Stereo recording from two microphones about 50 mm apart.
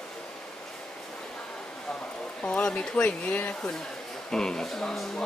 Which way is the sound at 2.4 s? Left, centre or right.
Left.